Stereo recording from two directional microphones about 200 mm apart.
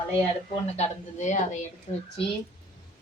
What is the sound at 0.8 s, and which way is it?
A woman's voice, 35° left (ahead or behind).